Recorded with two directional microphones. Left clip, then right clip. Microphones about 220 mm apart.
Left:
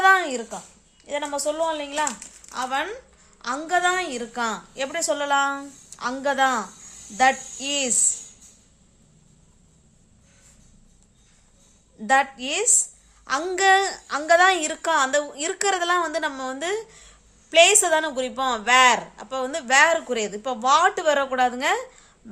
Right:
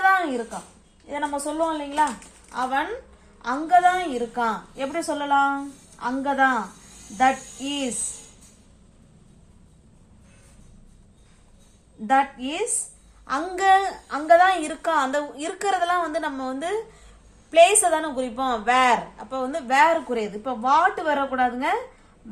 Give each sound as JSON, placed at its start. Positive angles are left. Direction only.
{"t": 1.0, "sound": "a woman's voice", "side_deg": 45}
{"t": 12.0, "sound": "a woman's voice", "side_deg": 50}
{"t": 13.2, "sound": "a woman's voice", "side_deg": 40}